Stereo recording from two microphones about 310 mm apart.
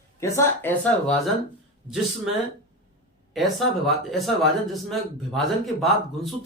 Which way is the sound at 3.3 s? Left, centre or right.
Centre.